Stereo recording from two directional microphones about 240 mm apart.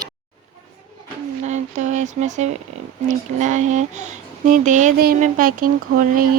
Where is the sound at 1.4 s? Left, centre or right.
Right.